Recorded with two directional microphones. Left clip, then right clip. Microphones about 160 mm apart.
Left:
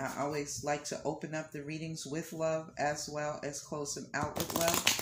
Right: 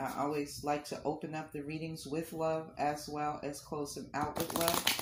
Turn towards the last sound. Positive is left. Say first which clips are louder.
# left 2 dB
turn(degrees=15)  # may be behind; listen again after turning